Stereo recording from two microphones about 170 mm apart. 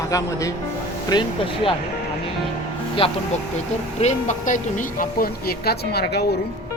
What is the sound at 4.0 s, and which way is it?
Speech, 45° left (ahead or behind).